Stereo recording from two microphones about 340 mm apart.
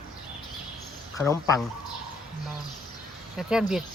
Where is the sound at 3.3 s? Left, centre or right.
Centre.